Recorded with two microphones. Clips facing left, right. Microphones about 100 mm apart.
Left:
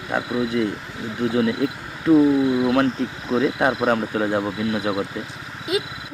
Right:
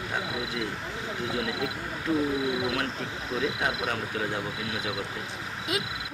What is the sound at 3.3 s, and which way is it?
Speech, 55° left (ahead or behind).